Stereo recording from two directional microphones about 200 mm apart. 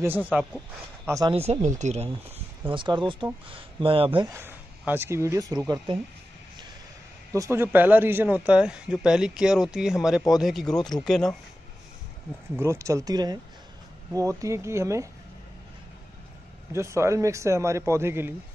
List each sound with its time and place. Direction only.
0.0 s speech: 10° right (ahead or behind)
1.3 s speech: 30° right (ahead or behind)
2.7 s speech: 25° right (ahead or behind)
4.3 s speech: 10° right (ahead or behind)
7.3 s speech: 15° right (ahead or behind); by 11.3 s centre (ahead or behind)
12.5 s speech: 15° right (ahead or behind)
16.7 s speech: 15° right (ahead or behind)